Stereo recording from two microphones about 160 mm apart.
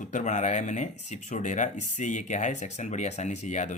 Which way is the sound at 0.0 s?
50° left (ahead or behind).